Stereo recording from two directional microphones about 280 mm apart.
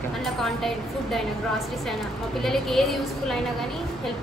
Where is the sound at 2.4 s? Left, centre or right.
Centre.